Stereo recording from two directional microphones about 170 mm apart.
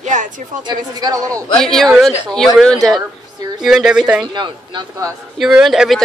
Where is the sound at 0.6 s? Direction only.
25° right (ahead or behind).